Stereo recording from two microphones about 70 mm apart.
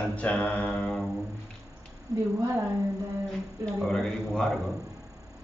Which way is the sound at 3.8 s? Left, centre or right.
Centre.